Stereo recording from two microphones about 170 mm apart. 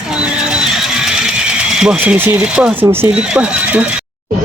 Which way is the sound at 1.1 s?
5° right (ahead or behind).